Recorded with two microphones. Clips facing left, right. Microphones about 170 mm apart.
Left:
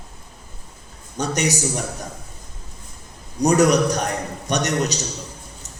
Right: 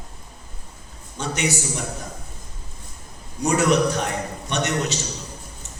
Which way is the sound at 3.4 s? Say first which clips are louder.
Left 3 dB; 40° left (ahead or behind).